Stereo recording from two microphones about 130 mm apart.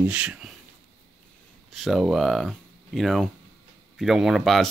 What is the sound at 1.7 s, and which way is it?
Speech, centre (ahead or behind).